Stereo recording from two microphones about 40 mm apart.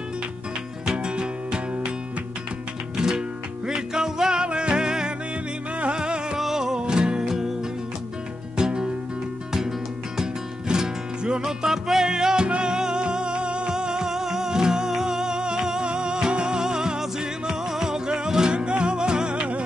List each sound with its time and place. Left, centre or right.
0.9 s music: right
3.0 s music: centre
6.3 s music: centre
8.5 s music: centre
19.3 s music: right